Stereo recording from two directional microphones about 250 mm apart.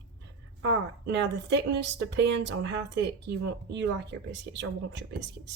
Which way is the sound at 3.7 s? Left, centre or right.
Right.